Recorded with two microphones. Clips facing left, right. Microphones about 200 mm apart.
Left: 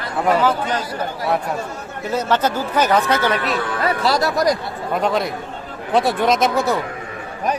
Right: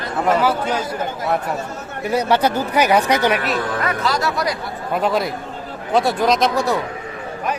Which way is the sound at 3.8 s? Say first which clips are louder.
Left 2 dB; 35° left (ahead or behind).